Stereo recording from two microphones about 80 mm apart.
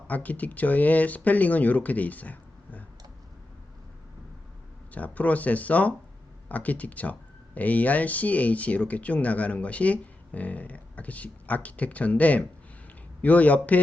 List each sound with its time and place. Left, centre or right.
0.1 s speech: centre
4.9 s speech: centre